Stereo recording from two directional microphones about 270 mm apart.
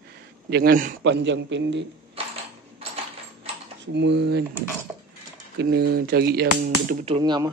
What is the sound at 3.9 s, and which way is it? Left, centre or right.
Speech, right.